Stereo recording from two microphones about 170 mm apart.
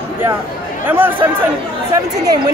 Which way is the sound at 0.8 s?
10° right (ahead or behind).